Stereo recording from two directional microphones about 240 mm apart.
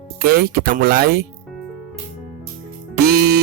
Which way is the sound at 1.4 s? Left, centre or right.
Centre.